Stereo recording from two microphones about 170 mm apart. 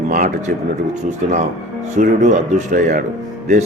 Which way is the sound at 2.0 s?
50° right (ahead or behind).